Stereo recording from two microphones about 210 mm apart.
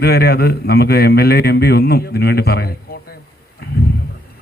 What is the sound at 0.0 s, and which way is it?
A man's voice, 50° left (ahead or behind).